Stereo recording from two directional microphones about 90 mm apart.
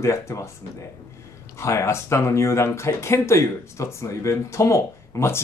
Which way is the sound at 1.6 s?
35° left (ahead or behind).